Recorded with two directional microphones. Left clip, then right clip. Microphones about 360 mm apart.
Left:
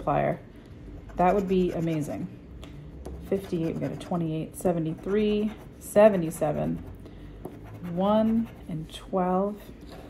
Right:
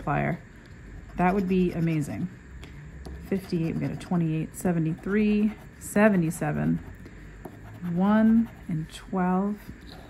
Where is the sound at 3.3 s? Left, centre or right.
Centre.